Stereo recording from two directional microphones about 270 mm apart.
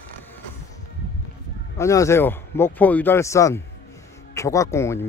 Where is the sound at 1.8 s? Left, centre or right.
Centre.